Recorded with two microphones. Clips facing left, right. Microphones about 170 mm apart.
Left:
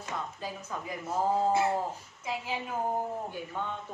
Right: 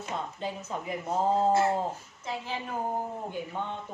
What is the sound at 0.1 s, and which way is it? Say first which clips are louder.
Speech: right 3 dB; 25° right (ahead or behind).